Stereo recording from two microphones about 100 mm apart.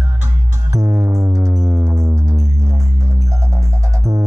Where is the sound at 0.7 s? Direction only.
30° right (ahead or behind).